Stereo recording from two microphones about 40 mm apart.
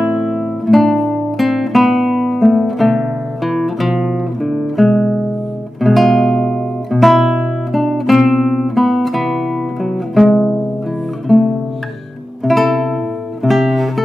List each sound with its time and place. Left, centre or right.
0.0 s guitar: centre
4.5 s music: centre
6.9 s guitar: centre
10.2 s music: centre
11.2 s guitar: centre
13.4 s music: centre